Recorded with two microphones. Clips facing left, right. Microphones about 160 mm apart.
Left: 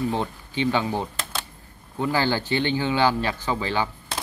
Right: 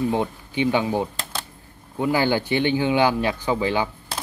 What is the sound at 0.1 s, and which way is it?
Speech, 15° right (ahead or behind).